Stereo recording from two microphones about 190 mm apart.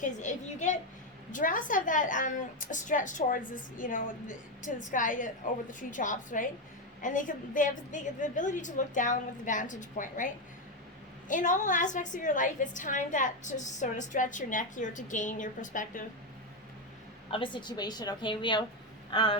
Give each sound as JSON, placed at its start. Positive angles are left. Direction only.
{"t": 0.0, "sound": "a woman's voice", "side_deg": 40}
{"t": 17.3, "sound": "a woman's voice", "side_deg": 25}